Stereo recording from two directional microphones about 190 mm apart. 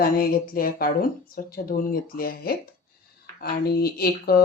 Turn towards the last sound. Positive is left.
turn(degrees=55)  # may be behind; listen again after turning